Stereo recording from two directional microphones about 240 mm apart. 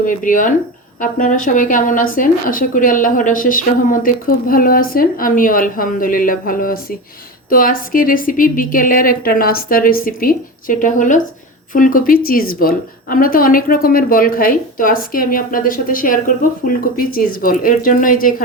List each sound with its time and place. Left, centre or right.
0.0 s speech: left